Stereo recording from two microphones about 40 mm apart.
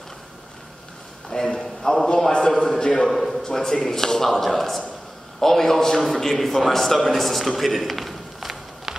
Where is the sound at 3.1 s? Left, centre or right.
Centre.